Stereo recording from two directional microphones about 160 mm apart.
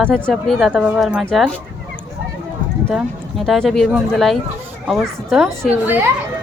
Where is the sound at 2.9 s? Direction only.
Centre (ahead or behind).